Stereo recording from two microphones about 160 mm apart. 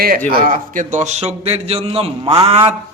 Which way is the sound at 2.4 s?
40° right (ahead or behind).